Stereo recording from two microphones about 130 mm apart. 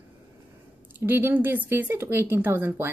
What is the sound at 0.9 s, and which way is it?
A woman's voice, 15° right (ahead or behind).